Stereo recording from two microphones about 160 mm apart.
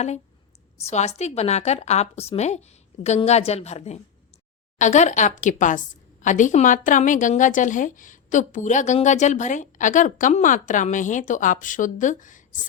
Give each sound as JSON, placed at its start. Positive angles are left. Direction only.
{"t": 0.8, "sound": "a woman's voice", "side_deg": 45}